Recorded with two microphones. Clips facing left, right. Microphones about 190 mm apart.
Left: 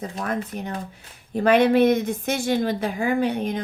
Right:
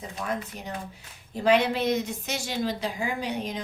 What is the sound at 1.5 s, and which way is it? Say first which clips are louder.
A woman's voice: left 6 dB; 55° left (ahead or behind).